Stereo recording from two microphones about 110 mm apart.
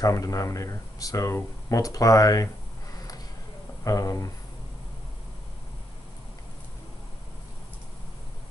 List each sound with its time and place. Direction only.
0.0 s speech: 30° left (ahead or behind)
3.8 s speech: 30° left (ahead or behind)